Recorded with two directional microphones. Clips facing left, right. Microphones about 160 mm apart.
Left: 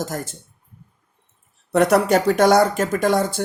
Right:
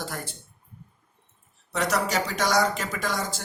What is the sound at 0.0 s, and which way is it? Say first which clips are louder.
Speech: left 7 dB; 45° left (ahead or behind).